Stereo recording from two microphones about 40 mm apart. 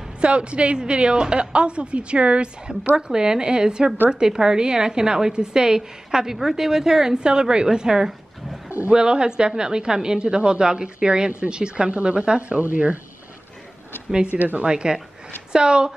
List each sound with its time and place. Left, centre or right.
0.2 s a woman's voice: right
14.3 s a woman's voice: right
14.6 s a woman's voice: right